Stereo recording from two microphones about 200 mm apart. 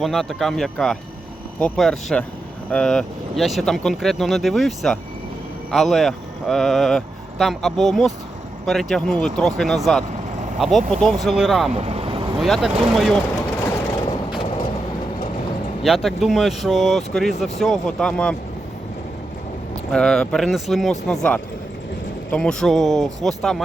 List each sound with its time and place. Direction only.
0.0 s speech: centre (ahead or behind)
11.7 s vehicle: 30° right (ahead or behind)
12.4 s speech: centre (ahead or behind)
15.8 s speech: centre (ahead or behind)
19.9 s speech: 5° left (ahead or behind)